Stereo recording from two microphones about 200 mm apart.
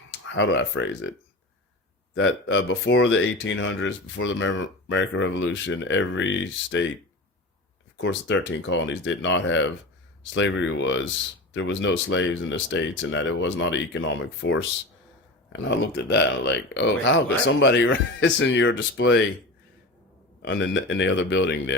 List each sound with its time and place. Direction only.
0.3 s speech: 65° left (ahead or behind)
2.1 s speech: 70° left (ahead or behind)
7.9 s speech: 65° left (ahead or behind)
20.4 s speech: 65° left (ahead or behind)